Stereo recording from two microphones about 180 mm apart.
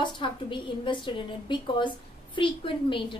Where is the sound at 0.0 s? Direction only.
25° left (ahead or behind).